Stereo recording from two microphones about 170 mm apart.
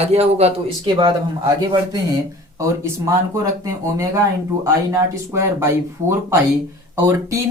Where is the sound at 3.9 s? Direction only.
20° right (ahead or behind).